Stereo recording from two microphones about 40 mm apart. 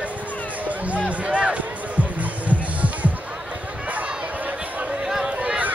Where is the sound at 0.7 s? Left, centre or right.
Right.